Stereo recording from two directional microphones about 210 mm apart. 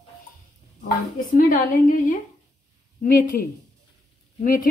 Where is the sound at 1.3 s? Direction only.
40° left (ahead or behind).